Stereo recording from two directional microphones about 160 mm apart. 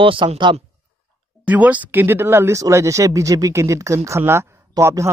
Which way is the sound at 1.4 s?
10° right (ahead or behind).